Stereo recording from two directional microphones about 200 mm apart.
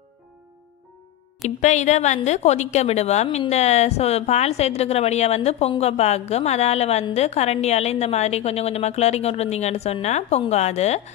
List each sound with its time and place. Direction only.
1.6 s a woman's voice: 35° left (ahead or behind)